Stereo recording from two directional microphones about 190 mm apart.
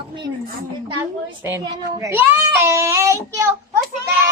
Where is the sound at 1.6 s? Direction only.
20° right (ahead or behind).